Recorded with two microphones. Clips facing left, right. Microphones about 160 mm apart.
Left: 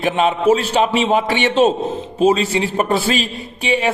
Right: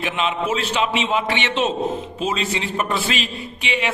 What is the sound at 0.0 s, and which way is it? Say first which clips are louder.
A man's voice: left 8 dB; 40° left (ahead or behind).